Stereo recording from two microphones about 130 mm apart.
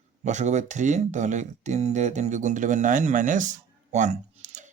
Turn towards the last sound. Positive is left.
turn(degrees=-65)  # may be behind; listen again after turning